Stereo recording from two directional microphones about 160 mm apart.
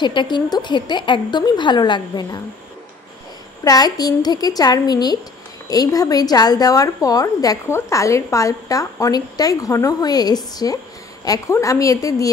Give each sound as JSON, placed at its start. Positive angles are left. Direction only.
{"t": 0.0, "sound": "a woman's voice", "side_deg": 30}
{"t": 3.6, "sound": "a woman's voice", "side_deg": 25}